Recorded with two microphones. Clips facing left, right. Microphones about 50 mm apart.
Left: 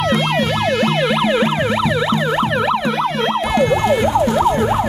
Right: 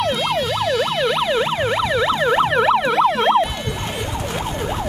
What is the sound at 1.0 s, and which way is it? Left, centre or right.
Emergency vehicle, centre.